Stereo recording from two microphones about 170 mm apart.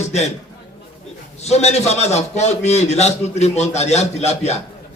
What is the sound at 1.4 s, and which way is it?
A man's voice, 40° left (ahead or behind).